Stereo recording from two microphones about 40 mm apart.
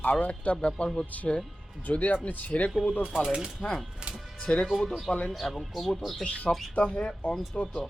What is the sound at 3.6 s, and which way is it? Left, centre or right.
Speech, centre.